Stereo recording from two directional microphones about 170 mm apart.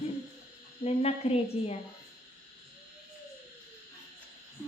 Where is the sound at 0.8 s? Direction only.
40° left (ahead or behind).